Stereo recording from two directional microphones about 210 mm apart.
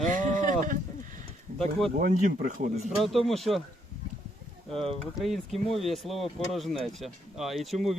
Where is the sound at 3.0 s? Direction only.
Centre (ahead or behind).